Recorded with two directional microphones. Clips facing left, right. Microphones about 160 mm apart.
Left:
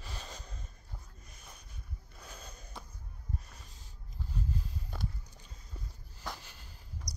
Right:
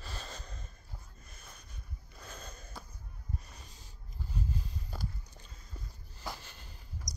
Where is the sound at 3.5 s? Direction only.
Centre (ahead or behind).